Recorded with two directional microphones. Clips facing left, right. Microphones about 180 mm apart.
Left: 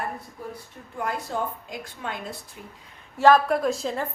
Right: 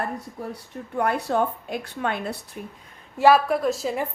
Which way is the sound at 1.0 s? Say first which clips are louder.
Right 6 dB; 65° right (ahead or behind).